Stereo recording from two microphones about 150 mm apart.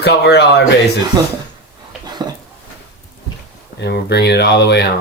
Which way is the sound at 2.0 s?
25° right (ahead or behind).